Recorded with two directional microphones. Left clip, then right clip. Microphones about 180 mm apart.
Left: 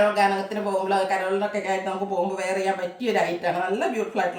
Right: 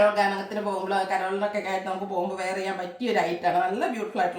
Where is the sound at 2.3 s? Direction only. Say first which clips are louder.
Left 4 dB; 20° left (ahead or behind).